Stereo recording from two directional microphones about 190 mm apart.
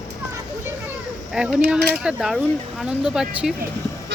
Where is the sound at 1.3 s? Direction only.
5° right (ahead or behind).